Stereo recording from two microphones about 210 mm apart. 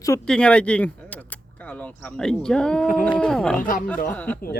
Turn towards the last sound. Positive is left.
turn(degrees=5)  # may be behind; listen again after turning